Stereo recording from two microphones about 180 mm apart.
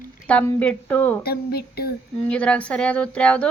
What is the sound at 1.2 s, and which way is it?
Speech, 60° left (ahead or behind).